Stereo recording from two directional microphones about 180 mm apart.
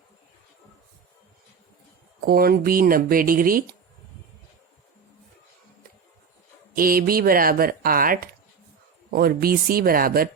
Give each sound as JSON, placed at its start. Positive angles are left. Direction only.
{"t": 2.2, "sound": "speech", "side_deg": -55}
{"t": 6.7, "sound": "speech", "side_deg": -55}